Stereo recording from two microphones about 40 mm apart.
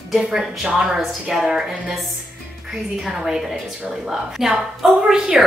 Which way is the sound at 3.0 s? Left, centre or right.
Centre.